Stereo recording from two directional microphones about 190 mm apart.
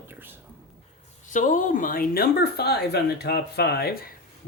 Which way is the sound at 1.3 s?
40° left (ahead or behind).